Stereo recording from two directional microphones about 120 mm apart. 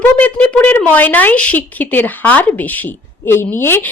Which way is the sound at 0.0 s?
15° left (ahead or behind).